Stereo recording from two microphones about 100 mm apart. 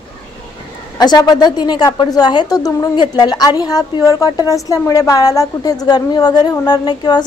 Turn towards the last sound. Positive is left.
turn(degrees=45)  # may be behind; listen again after turning